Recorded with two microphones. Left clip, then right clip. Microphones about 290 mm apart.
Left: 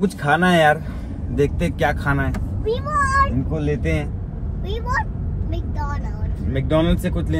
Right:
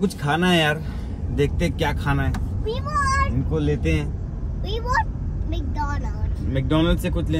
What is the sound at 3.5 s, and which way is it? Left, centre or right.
Speech, centre.